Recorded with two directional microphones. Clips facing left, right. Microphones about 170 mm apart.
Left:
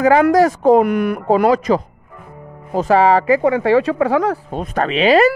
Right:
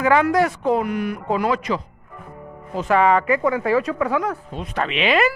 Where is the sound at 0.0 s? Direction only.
40° left (ahead or behind).